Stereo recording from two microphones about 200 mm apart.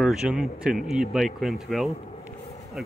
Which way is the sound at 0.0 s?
5° right (ahead or behind).